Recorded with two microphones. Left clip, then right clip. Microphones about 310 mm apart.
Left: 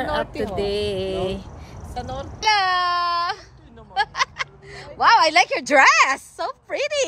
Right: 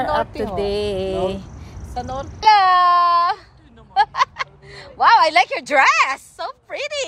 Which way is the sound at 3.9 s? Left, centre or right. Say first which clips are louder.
Right 5 dB; centre.